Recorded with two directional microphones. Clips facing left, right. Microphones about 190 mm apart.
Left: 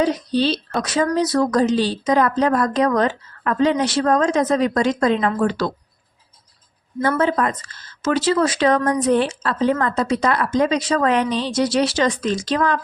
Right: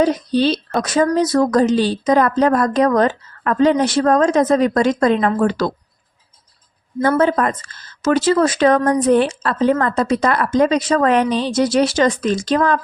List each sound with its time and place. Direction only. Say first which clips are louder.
0.0 s a woman's voice: right 3 dB; 50° right (ahead or behind)
7.0 s a woman's voice: right 3 dB; 50° right (ahead or behind)